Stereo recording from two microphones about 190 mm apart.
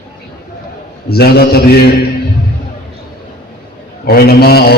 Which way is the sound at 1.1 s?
55° left (ahead or behind).